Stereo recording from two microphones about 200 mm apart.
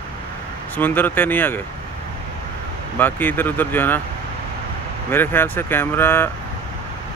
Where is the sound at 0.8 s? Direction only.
10° left (ahead or behind).